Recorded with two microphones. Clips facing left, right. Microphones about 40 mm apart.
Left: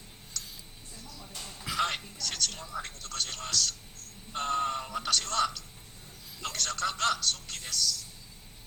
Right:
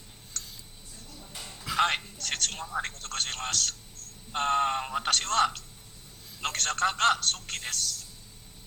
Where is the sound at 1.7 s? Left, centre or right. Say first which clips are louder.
Right 5 dB; right.